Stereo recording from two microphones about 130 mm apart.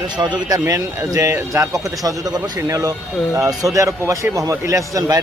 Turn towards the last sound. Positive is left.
turn(degrees=-25)  # may be behind; listen again after turning